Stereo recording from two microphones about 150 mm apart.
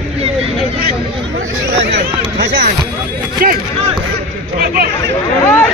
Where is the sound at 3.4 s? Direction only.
75° right (ahead or behind).